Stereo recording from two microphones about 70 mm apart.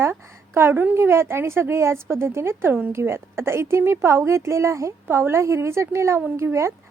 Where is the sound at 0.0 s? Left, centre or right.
Right.